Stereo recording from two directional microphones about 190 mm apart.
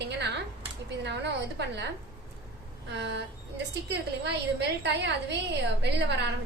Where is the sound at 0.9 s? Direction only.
65° right (ahead or behind).